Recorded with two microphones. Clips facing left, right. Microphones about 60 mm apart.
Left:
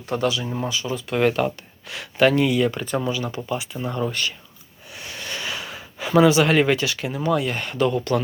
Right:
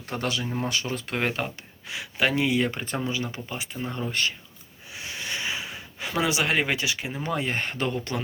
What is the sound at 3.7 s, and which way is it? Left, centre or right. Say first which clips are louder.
Speech: left 4 dB; left.